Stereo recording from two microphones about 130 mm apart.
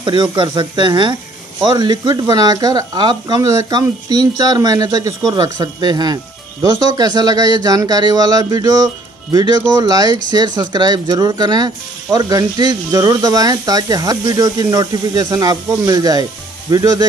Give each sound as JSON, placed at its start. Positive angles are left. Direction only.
{"t": 0.0, "sound": "speech", "side_deg": -40}